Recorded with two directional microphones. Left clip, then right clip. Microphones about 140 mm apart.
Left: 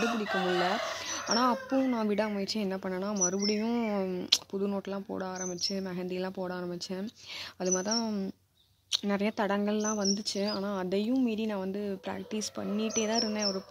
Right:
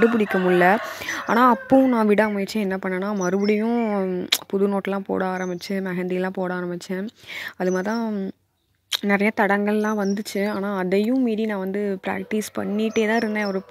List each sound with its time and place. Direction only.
0.0 s speech: 50° right (ahead or behind)
1.7 s speech: 30° right (ahead or behind)
2.0 s speech: 45° right (ahead or behind)
3.4 s speech: 25° right (ahead or behind)
4.3 s speech: 40° right (ahead or behind)
8.0 s speech: 20° right (ahead or behind)
8.9 s speech: 35° right (ahead or behind)